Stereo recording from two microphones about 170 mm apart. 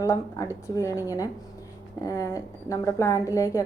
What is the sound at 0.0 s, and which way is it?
Speech, 20° left (ahead or behind).